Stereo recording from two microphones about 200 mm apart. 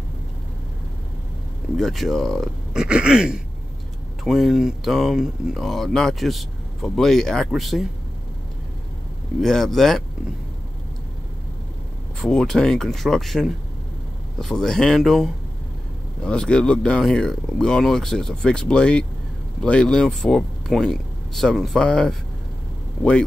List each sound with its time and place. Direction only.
1.8 s speech: centre (ahead or behind)
9.4 s speech: centre (ahead or behind)
12.2 s speech: 5° left (ahead or behind)